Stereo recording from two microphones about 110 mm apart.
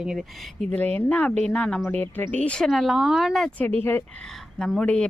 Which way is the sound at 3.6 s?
15° left (ahead or behind).